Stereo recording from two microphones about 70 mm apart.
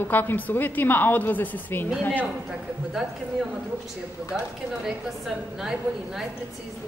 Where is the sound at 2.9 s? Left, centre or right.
Centre.